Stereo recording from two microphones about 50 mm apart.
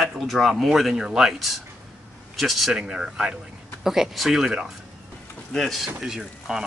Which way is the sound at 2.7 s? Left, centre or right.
Centre.